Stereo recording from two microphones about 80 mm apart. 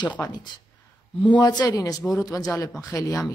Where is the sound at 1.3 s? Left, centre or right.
Left.